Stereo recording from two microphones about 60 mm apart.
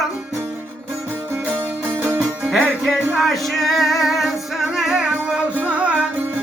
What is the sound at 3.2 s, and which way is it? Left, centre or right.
Music, centre.